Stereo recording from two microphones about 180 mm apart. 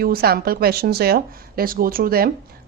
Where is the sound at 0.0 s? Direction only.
55° right (ahead or behind).